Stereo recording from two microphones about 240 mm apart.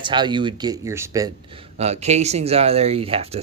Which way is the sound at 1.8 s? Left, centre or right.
Right.